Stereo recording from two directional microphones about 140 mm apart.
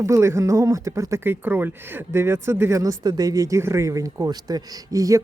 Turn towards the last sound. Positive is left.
turn(degrees=-25)  # may be behind; listen again after turning